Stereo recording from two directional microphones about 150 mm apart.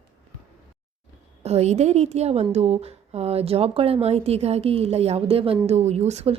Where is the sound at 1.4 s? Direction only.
45° right (ahead or behind).